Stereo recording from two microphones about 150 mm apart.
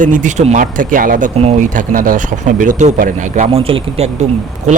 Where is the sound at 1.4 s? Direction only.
40° right (ahead or behind).